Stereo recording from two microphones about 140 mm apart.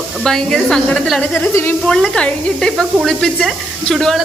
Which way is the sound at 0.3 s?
5° left (ahead or behind).